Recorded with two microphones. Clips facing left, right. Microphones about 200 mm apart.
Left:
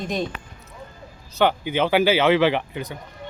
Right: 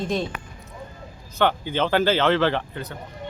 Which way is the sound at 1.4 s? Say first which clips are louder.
Left 2 dB; 10° left (ahead or behind).